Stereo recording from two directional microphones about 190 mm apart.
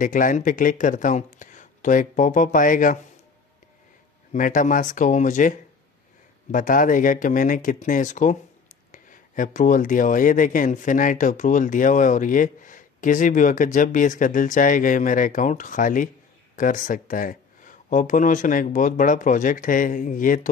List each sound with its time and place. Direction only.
0.0 s speech: 45° left (ahead or behind)
4.3 s speech: 45° left (ahead or behind)
6.5 s speech: 45° left (ahead or behind)